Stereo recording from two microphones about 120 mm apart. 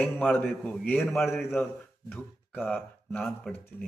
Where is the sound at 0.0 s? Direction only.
10° left (ahead or behind).